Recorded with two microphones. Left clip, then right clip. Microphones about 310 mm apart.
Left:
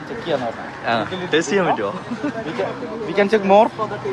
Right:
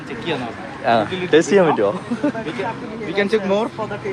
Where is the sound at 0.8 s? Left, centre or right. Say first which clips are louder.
Right 4 dB; centre.